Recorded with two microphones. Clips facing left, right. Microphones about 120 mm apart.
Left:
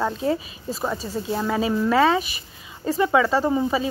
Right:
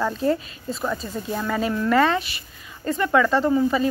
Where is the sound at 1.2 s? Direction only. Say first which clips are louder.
Left 5 dB; 20° left (ahead or behind).